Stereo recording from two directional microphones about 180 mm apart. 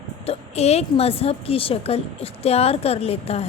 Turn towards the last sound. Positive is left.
turn(degrees=35)  # may be behind; listen again after turning